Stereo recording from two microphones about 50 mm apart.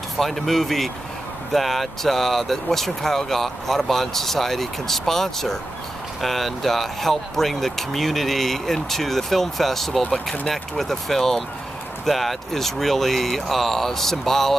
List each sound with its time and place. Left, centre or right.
0.2 s speech: centre
10.0 s speech: left
10.4 s speech: centre